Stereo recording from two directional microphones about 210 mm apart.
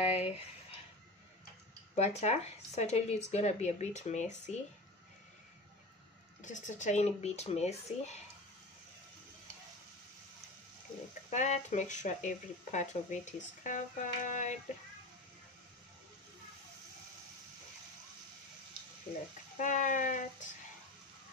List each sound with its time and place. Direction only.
0.0 s a sound: 30° left (ahead or behind)
2.0 s speech: 30° left (ahead or behind)
6.4 s speech: 35° left (ahead or behind)
11.2 s speech: 35° left (ahead or behind)
19.6 s speech: 35° left (ahead or behind)